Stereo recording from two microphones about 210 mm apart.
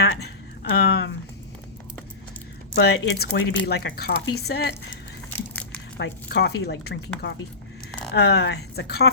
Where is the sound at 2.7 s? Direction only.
50° left (ahead or behind).